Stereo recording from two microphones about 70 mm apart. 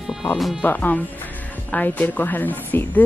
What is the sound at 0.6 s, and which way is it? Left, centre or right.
Speech, left.